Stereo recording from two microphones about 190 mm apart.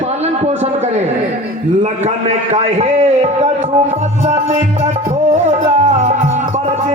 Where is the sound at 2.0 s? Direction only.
35° right (ahead or behind).